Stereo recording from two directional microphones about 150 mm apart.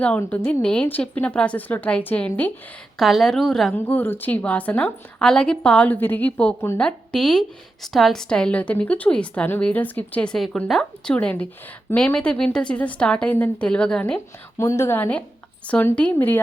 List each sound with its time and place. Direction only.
0.0 s a woman's voice: 10° left (ahead or behind)
14.6 s a woman's voice: 20° left (ahead or behind)